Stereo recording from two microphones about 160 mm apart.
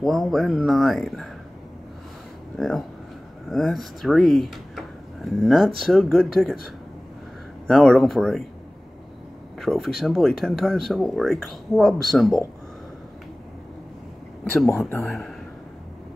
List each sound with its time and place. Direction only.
0.0 s speech: centre (ahead or behind)
2.5 s speech: centre (ahead or behind)
9.6 s speech: centre (ahead or behind)
14.7 s speech: 15° left (ahead or behind)
15.0 s speech: centre (ahead or behind)